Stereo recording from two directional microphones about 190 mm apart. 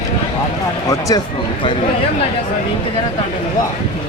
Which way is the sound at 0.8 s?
20° left (ahead or behind).